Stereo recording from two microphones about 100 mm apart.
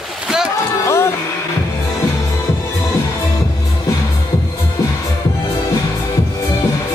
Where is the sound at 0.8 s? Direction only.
30° left (ahead or behind).